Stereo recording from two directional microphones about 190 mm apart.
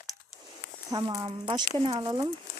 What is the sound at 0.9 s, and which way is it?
Speech, 20° right (ahead or behind).